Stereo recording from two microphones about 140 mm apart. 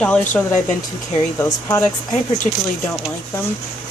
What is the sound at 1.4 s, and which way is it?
Speech, 15° left (ahead or behind).